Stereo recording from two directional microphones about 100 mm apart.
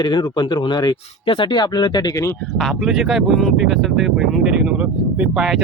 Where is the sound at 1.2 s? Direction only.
60° left (ahead or behind); by 2.4 s 30° left (ahead or behind).